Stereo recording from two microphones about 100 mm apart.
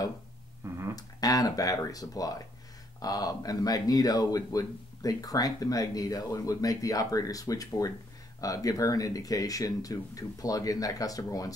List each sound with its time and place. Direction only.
0.9 s speech: 35° left (ahead or behind)